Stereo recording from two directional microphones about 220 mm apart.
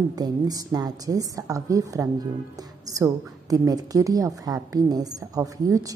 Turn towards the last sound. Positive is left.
turn(degrees=-15)  # may be behind; listen again after turning